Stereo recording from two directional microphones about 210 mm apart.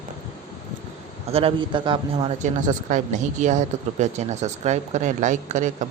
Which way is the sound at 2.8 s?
35° right (ahead or behind).